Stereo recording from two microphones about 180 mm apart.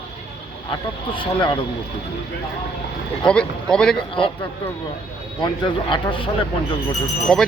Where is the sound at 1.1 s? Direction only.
25° left (ahead or behind).